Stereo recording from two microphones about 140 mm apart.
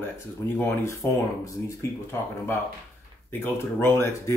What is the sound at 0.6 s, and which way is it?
Speech, 15° left (ahead or behind).